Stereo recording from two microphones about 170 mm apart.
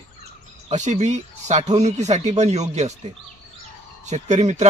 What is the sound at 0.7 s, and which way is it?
Speech, 45° right (ahead or behind).